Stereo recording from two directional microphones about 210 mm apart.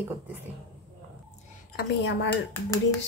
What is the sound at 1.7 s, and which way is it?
Speech, 55° left (ahead or behind).